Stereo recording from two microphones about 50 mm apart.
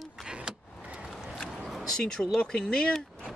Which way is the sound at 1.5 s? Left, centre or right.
Centre.